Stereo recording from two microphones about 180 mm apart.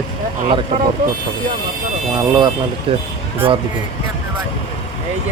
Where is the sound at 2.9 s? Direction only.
30° right (ahead or behind).